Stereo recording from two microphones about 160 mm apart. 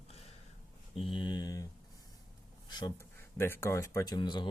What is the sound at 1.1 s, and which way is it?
Speech, 25° left (ahead or behind).